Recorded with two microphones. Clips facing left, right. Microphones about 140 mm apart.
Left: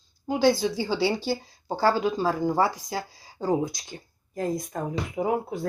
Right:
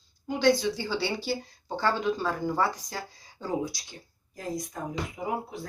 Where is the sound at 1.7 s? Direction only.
35° left (ahead or behind).